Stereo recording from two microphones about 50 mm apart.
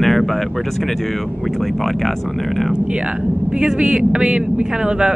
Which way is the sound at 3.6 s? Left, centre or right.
Centre.